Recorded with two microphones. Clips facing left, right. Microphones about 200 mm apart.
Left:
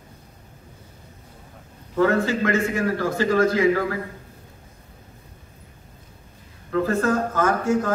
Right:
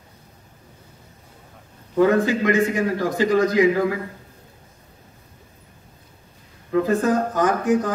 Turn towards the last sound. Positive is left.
turn(degrees=-15)  # may be behind; listen again after turning